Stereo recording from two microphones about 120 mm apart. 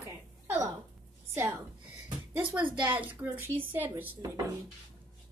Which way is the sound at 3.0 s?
15° right (ahead or behind).